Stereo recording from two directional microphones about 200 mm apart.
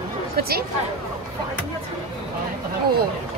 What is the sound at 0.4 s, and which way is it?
Speech, 50° right (ahead or behind).